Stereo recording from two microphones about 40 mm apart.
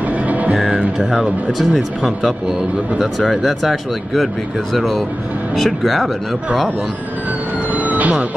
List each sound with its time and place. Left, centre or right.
1.7 s speech: centre
7.7 s vehicle: right